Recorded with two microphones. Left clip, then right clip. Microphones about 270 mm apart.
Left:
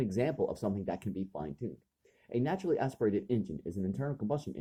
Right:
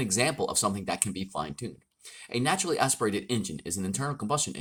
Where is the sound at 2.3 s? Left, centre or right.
Centre.